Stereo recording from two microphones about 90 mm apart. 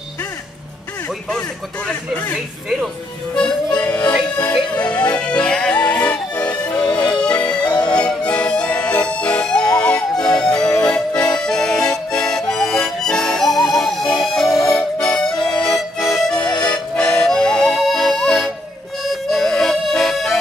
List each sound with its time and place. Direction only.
1.9 s speech: 15° left (ahead or behind)
3.3 s music: 10° left (ahead or behind)
4.7 s speech: 15° left (ahead or behind)
5.1 s music: 10° left (ahead or behind)
16.6 s accordion: 10° left (ahead or behind)
19.0 s music: 5° left (ahead or behind)